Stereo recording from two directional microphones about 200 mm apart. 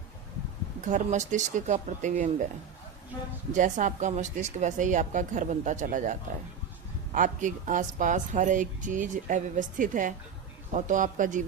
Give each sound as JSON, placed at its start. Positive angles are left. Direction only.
{"t": 0.9, "sound": "speech", "side_deg": -40}
{"t": 3.5, "sound": "speech", "side_deg": -40}